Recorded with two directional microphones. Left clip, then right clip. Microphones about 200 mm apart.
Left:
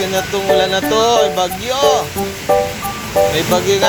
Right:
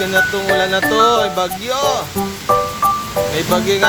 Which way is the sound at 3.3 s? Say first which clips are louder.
Left 2 dB; 15° right (ahead or behind).